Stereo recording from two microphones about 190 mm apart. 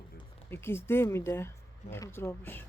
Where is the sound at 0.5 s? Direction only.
10° left (ahead or behind).